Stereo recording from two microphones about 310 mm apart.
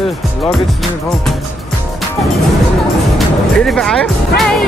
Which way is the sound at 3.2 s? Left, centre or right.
Centre.